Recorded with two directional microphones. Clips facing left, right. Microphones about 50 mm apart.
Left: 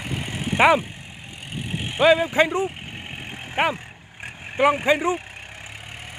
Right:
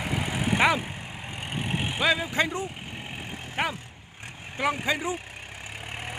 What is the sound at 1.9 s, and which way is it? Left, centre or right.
Speech, left.